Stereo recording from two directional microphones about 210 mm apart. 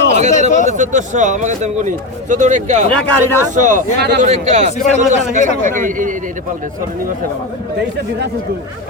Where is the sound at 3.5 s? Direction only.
35° right (ahead or behind).